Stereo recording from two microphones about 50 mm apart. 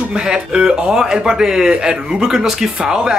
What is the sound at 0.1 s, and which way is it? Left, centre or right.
Speech, centre.